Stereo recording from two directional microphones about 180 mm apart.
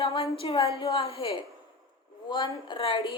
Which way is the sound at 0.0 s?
30° left (ahead or behind).